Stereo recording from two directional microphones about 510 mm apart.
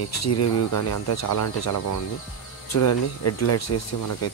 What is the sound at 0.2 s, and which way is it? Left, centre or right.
Speech, left.